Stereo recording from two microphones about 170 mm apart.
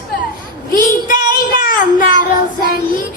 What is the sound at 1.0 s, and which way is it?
Child singing, 50° left (ahead or behind).